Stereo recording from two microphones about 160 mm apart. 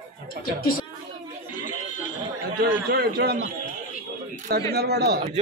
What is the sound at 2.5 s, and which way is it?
Speech, 90° right.